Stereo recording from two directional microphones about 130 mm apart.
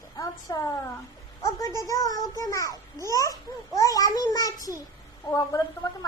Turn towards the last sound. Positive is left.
turn(degrees=25)  # may be behind; listen again after turning